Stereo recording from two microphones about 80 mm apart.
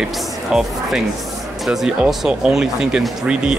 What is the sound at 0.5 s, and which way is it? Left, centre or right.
Speech, centre.